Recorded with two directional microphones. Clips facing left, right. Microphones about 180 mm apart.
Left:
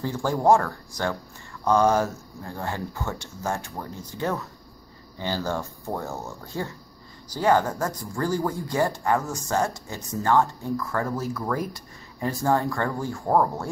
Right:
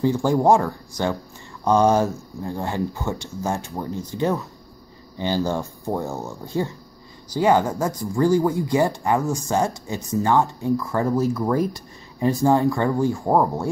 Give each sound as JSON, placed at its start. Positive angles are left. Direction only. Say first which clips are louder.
{"t": 0.0, "sound": "speech", "louder": "right 5 dB", "side_deg": -15}